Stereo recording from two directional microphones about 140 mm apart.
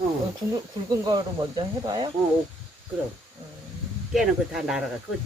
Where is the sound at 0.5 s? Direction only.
30° right (ahead or behind).